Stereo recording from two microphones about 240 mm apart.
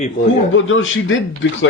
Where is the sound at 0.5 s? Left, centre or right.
Left.